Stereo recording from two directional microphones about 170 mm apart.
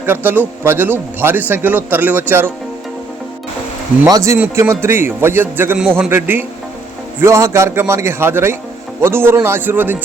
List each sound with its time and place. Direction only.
0.0 s a man's voice: 10° right (ahead or behind)
4.0 s a man's voice: 20° right (ahead or behind)